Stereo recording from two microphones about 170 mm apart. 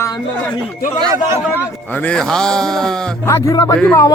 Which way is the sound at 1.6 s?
10° left (ahead or behind).